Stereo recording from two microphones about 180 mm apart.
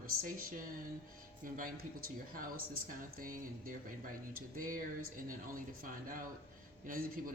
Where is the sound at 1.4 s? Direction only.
50° right (ahead or behind).